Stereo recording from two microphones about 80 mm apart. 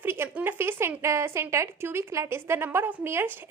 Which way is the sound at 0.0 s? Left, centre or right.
Right.